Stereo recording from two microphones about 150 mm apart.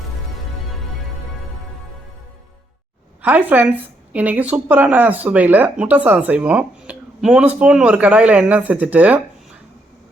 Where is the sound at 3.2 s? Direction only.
10° right (ahead or behind).